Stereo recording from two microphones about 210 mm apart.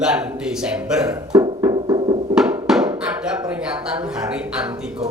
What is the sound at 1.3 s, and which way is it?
Music, 20° right (ahead or behind).